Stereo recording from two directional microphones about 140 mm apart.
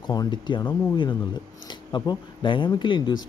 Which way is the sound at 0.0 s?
30° left (ahead or behind).